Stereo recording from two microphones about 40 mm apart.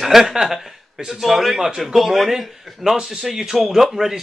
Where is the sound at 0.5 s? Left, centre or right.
Centre.